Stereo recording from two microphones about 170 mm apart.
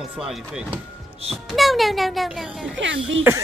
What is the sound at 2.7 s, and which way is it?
Speech, 90° right.